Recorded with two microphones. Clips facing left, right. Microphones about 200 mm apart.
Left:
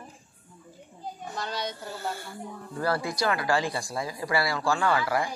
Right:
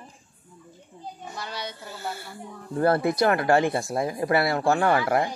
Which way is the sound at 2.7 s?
50° right (ahead or behind).